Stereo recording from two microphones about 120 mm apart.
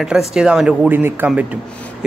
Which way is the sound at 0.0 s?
5° right (ahead or behind).